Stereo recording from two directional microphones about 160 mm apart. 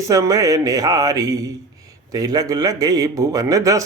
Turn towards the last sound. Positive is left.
turn(degrees=-20)  # may be behind; listen again after turning